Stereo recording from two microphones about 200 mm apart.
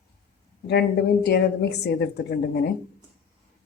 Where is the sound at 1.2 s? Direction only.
55° left (ahead or behind).